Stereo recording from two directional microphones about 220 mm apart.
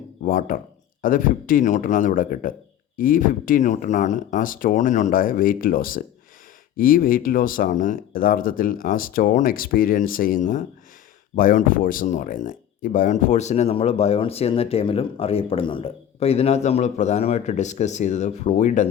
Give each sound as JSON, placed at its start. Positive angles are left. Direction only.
{"t": 0.3, "sound": "speech", "side_deg": 35}